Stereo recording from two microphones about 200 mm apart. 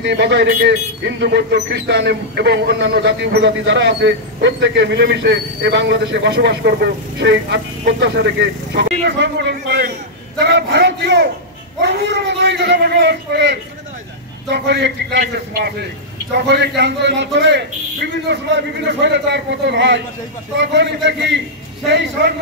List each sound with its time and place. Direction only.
0.0 s a man's voice: 60° right (ahead or behind)
18.9 s a man's voice: 60° right (ahead or behind)